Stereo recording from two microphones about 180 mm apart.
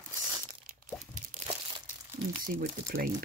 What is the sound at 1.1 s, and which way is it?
Crunch, 40° right (ahead or behind).